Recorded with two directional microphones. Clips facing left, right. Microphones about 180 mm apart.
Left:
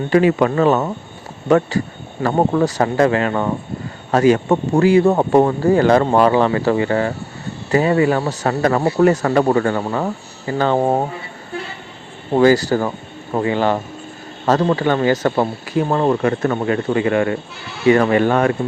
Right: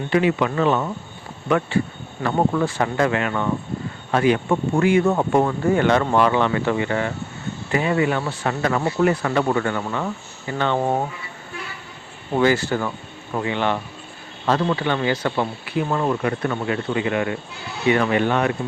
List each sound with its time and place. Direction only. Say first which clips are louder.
0.1 s speech: left 5 dB; 40° left (ahead or behind)